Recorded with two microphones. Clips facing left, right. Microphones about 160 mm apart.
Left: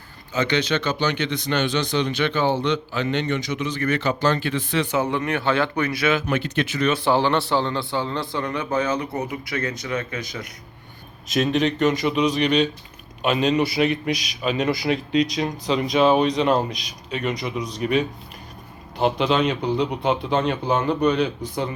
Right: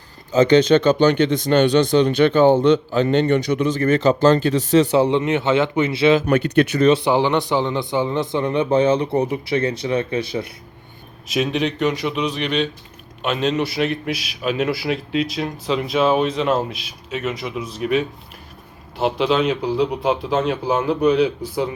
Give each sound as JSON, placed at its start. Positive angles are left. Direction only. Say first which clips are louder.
{"t": 0.3, "sound": "a man's voice", "louder": "right 9 dB", "side_deg": -40}
{"t": 3.8, "sound": "speech", "louder": "right 6 dB", "side_deg": -40}
{"t": 6.2, "sound": "a man's voice", "louder": "right 7 dB", "side_deg": -55}
{"t": 7.0, "sound": "speech", "louder": "right 2 dB", "side_deg": -15}
{"t": 11.3, "sound": "a man's voice", "louder": "even", "side_deg": -5}